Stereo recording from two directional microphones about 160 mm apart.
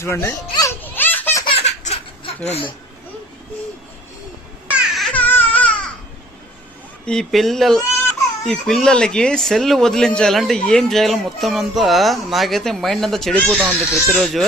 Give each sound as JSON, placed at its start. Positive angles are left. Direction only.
{"t": 0.0, "sound": "baby laughter", "side_deg": 15}
{"t": 1.5, "sound": "baby laughter", "side_deg": 40}
{"t": 4.7, "sound": "a sound", "side_deg": 0}
{"t": 7.0, "sound": "speech", "side_deg": 5}